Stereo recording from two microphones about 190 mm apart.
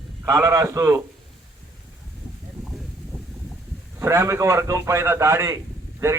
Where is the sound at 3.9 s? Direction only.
15° right (ahead or behind).